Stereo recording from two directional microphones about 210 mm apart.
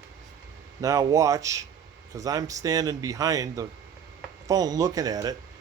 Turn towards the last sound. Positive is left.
turn(degrees=-15)  # may be behind; listen again after turning